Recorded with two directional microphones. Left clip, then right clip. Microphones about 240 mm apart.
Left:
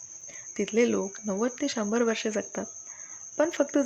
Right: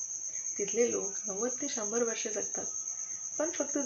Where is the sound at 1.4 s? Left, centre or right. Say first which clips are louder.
Left 7 dB; left.